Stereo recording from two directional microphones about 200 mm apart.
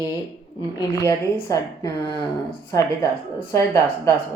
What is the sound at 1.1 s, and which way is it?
Speech, 10° left (ahead or behind).